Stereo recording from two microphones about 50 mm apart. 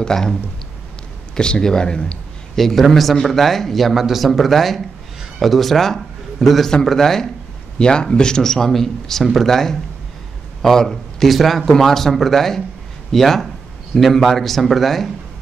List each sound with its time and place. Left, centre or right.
0.0 s a man's voice: centre
2.5 s a man's voice: centre